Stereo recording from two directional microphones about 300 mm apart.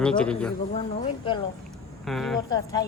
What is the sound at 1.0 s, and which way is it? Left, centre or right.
Speech, centre.